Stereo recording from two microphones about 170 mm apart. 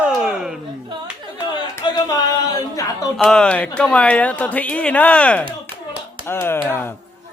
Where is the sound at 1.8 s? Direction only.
25° left (ahead or behind).